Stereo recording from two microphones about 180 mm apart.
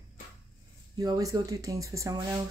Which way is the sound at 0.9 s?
20° right (ahead or behind).